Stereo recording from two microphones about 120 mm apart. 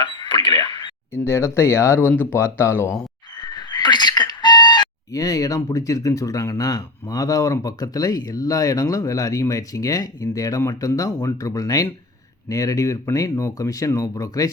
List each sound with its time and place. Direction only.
0.0 s a sound: 40° left (ahead or behind)
1.1 s speech: 20° left (ahead or behind)
3.3 s speech: 35° left (ahead or behind)